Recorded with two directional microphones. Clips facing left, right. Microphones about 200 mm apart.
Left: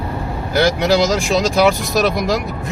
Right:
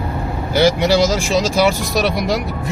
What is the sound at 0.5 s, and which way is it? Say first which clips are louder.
Speech: right 1 dB; centre (ahead or behind).